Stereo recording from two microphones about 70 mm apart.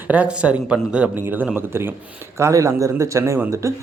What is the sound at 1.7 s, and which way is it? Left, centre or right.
Speech, right.